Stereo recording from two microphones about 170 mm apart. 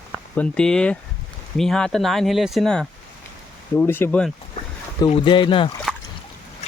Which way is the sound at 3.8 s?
10° left (ahead or behind).